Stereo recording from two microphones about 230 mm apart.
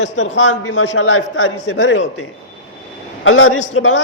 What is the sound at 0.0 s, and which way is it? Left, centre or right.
A man's voice, left.